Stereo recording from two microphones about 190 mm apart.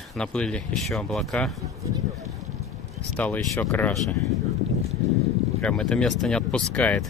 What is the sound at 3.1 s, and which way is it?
Speech, 10° left (ahead or behind).